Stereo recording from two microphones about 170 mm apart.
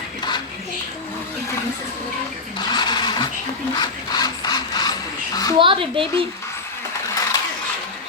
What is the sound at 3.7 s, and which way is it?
Printer, 25° left (ahead or behind).